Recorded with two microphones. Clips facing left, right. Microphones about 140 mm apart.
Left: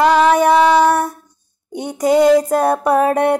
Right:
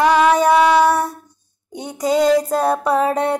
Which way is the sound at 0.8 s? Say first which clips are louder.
Left 1 dB; 55° left (ahead or behind).